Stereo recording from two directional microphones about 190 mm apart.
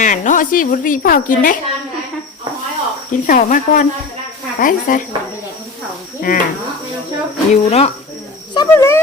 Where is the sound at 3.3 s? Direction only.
45° left (ahead or behind).